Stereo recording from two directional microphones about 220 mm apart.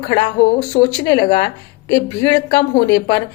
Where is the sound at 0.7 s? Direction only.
20° left (ahead or behind).